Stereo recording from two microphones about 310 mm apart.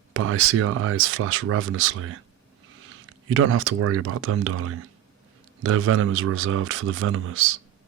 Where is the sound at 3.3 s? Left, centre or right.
Right.